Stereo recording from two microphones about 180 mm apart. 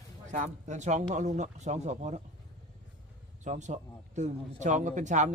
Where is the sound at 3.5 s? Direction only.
40° right (ahead or behind).